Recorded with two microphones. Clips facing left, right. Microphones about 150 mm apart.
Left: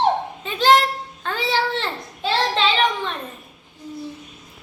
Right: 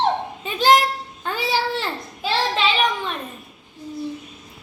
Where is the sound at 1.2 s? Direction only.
10° right (ahead or behind).